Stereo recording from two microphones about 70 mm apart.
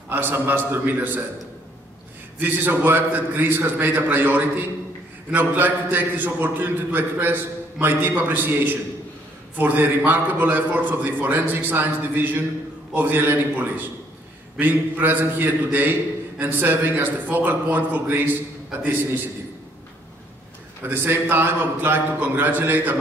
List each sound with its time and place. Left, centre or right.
0.1 s a man's voice: right
2.4 s a man's voice: right
20.8 s a man's voice: right